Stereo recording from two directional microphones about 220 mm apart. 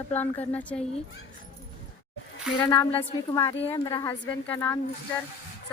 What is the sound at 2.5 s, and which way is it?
A woman's voice, 15° left (ahead or behind).